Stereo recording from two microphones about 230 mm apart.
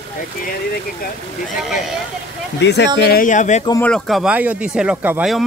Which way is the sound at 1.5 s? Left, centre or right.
Centre.